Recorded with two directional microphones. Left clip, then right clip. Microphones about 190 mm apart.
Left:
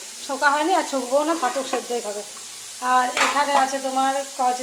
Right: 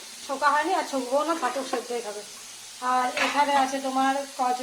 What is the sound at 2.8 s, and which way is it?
Speech, 5° left (ahead or behind).